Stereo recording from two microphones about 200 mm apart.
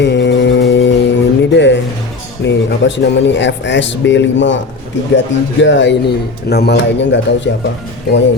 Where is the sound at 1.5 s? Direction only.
60° left (ahead or behind).